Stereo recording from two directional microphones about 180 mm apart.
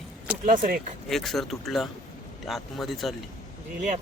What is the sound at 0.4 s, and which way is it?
Speech, 50° right (ahead or behind).